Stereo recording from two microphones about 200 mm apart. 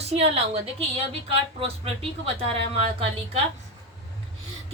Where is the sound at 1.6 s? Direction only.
30° right (ahead or behind).